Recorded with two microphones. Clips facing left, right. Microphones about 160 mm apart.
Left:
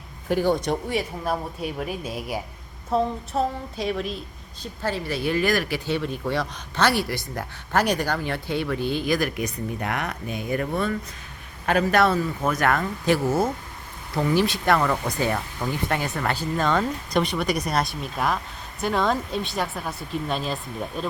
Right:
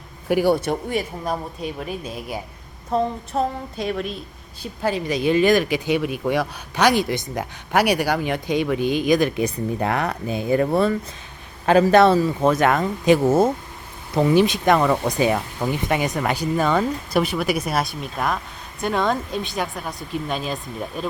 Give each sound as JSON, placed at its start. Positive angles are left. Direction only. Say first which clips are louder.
{"t": 0.3, "sound": "speech", "louder": "right 3 dB", "side_deg": -10}
{"t": 4.6, "sound": "speech", "louder": "right 4 dB", "side_deg": -15}